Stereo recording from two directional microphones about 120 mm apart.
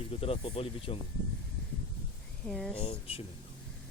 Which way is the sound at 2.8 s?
55° left (ahead or behind).